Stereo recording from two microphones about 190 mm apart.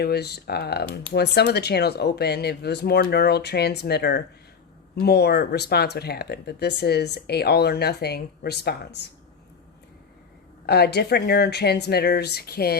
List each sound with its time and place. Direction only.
0.0 s speech: 60° left (ahead or behind)
10.7 s speech: 60° left (ahead or behind)